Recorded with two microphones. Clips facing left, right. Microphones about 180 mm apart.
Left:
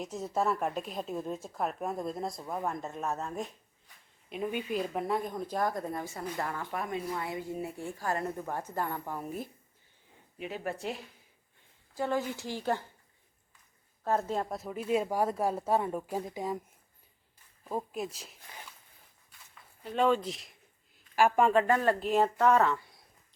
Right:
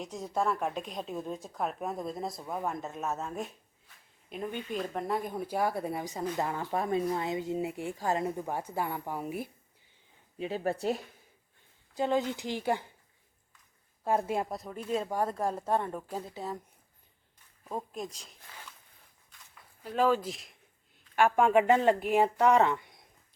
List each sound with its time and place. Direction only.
0.0 s speech: 5° left (ahead or behind)
10.3 s speech: 30° right (ahead or behind)
11.9 s speech: 20° right (ahead or behind)
14.0 s speech: 10° right (ahead or behind)
14.5 s speech: 5° left (ahead or behind)
17.6 s speech: 5° left (ahead or behind)
19.8 s speech: centre (ahead or behind)
21.5 s speech: 15° right (ahead or behind)